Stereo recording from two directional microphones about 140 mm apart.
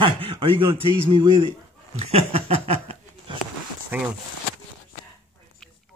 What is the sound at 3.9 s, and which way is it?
Speech, 15° right (ahead or behind).